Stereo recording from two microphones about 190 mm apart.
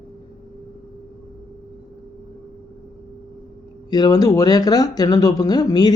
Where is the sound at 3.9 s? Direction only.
20° left (ahead or behind).